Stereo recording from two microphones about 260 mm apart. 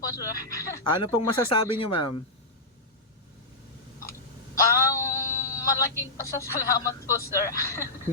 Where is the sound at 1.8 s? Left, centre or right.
Centre.